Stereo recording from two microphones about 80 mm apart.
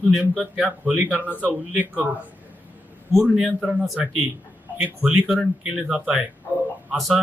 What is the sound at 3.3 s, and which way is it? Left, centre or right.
Speech, centre.